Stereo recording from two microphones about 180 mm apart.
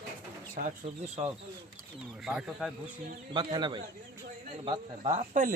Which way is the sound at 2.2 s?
5° right (ahead or behind).